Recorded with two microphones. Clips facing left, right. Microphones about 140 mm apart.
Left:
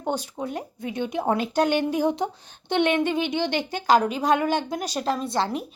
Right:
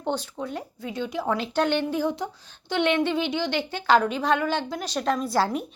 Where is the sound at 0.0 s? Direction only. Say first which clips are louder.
Left 1 dB; 10° left (ahead or behind).